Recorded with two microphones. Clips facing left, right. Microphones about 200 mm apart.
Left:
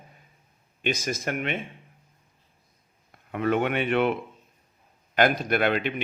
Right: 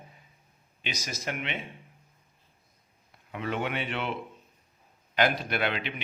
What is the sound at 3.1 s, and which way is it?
Speech, 55° left (ahead or behind).